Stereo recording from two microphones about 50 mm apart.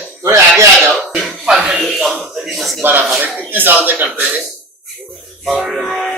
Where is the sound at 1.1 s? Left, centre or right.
Centre.